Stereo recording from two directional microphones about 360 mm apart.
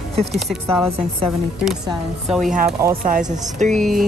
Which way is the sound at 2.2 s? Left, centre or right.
Centre.